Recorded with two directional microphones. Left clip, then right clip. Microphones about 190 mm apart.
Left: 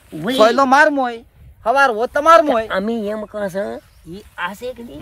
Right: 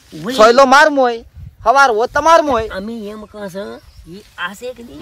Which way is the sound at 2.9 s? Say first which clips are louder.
Left 6 dB; 5° left (ahead or behind).